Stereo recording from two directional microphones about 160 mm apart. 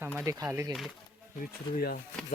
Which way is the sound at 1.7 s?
70° left (ahead or behind).